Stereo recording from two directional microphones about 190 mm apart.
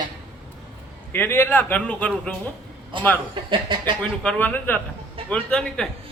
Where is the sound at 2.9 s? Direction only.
25° right (ahead or behind).